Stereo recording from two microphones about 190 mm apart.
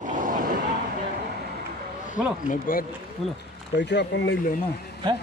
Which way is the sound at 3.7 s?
65° left (ahead or behind).